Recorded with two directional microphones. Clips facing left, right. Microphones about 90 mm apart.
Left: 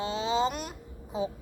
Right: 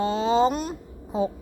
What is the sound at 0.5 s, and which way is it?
Speech, 30° right (ahead or behind).